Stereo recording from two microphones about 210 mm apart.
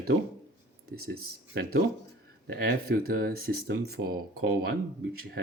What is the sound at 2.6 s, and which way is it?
Speech, 45° right (ahead or behind).